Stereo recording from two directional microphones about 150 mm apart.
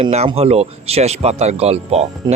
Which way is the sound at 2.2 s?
30° right (ahead or behind).